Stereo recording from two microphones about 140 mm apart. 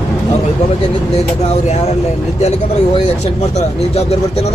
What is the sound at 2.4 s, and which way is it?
Speech, 50° left (ahead or behind).